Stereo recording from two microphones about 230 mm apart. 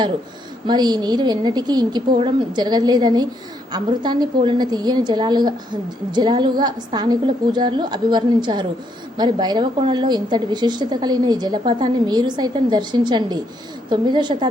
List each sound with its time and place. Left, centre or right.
0.7 s a woman's voice: centre